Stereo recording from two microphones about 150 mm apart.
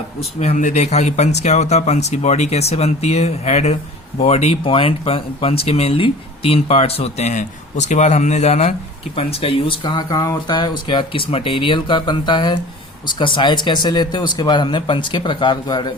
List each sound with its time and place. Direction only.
0.3 s speech: 50° left (ahead or behind); by 15.9 s 30° left (ahead or behind)